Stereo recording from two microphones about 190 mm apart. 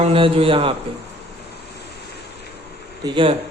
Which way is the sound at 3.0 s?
25° right (ahead or behind).